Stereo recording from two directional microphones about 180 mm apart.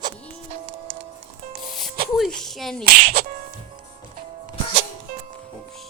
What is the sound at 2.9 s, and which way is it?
Speech, 55° right (ahead or behind).